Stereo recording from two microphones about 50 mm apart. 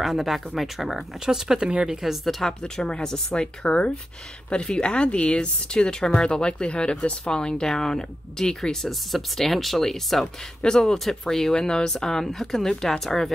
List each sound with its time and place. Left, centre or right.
0.0 s speech: centre
2.2 s speech: centre
2.6 s speech: centre